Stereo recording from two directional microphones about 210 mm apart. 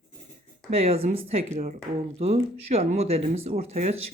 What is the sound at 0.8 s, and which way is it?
Speech, 30° right (ahead or behind).